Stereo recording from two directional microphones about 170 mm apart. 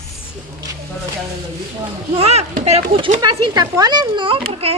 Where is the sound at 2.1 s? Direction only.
40° right (ahead or behind).